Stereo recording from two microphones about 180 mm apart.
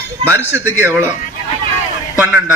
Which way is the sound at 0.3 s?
15° right (ahead or behind).